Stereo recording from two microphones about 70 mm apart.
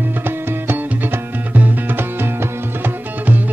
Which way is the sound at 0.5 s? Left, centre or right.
Right.